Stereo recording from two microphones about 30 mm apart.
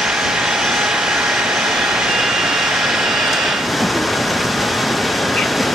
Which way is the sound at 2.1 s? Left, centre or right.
Centre.